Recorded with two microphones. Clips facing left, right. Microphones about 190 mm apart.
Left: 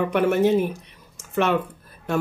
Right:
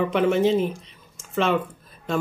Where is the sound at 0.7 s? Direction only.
65° left (ahead or behind).